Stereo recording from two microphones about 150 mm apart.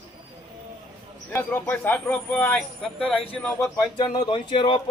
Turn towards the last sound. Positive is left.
turn(degrees=35)  # may be behind; listen again after turning